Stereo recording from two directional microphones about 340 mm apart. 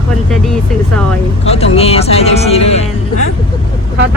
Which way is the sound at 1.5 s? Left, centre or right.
Centre.